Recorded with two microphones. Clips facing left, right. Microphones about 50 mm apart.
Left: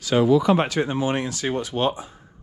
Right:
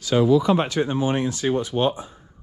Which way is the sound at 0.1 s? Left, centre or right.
Left.